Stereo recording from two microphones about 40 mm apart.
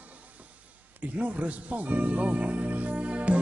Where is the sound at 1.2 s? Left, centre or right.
Right.